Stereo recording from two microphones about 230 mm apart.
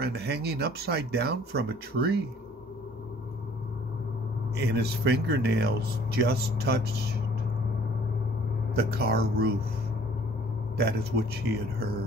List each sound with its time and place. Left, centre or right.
0.0 s a man's voice: right
4.6 s a man's voice: right
8.7 s a man's voice: right
10.8 s a man's voice: right